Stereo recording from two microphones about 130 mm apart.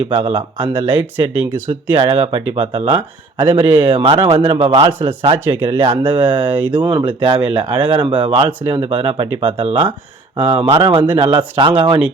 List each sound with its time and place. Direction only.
0.1 s speech: 40° right (ahead or behind)
1.3 s speech: 15° right (ahead or behind)
2.0 s speech: 45° right (ahead or behind)
4.9 s speech: 15° right (ahead or behind)
5.2 s speech: 40° right (ahead or behind)
6.5 s speech: 15° right (ahead or behind)
6.8 s speech: 35° right (ahead or behind)